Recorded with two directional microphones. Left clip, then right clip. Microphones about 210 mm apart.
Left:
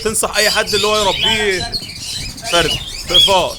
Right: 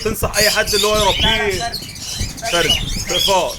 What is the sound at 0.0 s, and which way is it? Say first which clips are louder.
Speech: left 1 dB; 15° left (ahead or behind).